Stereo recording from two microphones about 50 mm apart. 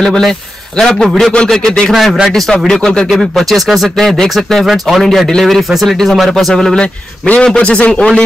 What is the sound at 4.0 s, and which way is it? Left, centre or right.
A man's voice, centre.